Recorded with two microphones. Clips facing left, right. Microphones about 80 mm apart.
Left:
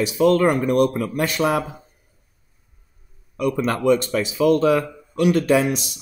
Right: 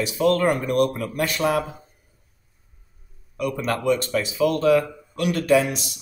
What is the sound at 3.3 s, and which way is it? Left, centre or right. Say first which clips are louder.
Speech: left 3 dB; centre.